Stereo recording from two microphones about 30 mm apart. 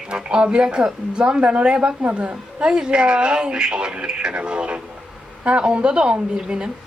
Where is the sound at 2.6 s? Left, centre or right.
Right.